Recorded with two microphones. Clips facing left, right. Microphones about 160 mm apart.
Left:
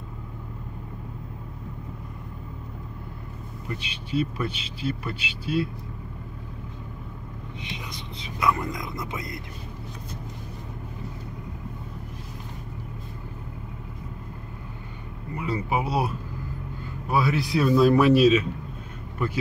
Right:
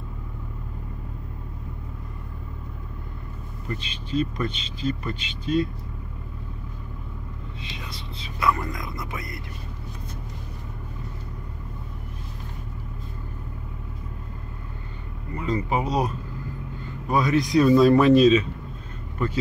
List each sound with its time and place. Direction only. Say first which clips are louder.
3.6 s speech: right 2 dB; 10° left (ahead or behind)
7.6 s speech: left 1 dB; 20° left (ahead or behind)
15.3 s speech: right 2 dB; 10° left (ahead or behind)